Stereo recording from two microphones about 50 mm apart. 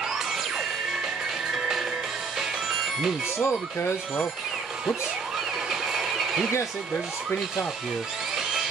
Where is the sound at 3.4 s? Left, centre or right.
Left.